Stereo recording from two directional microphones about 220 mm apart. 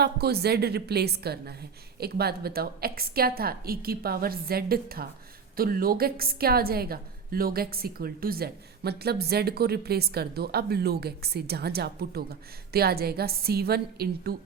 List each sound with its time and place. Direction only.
0.0 s a woman's voice: 45° right (ahead or behind)